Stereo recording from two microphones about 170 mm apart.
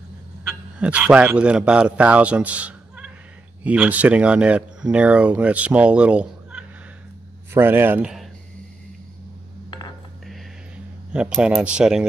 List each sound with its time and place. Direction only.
0.7 s a man's voice: 5° right (ahead or behind)
9.7 s dishes: 25° left (ahead or behind)
11.1 s speech: 5° right (ahead or behind)